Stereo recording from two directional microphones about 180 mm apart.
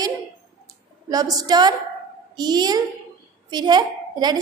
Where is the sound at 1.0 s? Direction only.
20° right (ahead or behind).